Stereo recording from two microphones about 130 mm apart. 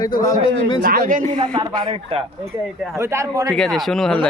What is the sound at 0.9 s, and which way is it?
Speech, 90° right.